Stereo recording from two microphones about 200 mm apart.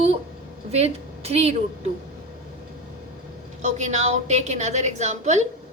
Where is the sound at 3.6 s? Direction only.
35° right (ahead or behind).